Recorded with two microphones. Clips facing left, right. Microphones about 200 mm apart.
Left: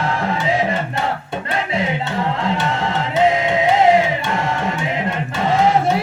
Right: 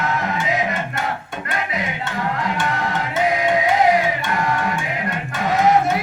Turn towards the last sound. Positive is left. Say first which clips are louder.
# left 1 dB
turn(degrees=25)  # may be behind; listen again after turning